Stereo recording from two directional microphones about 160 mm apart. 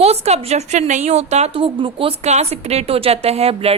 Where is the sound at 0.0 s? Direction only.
40° right (ahead or behind).